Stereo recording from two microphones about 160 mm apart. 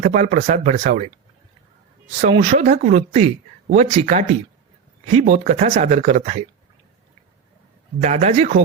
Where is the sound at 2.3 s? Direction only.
50° right (ahead or behind).